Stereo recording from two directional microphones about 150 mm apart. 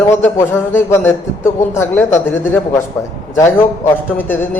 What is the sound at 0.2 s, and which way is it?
A man's voice, 15° left (ahead or behind).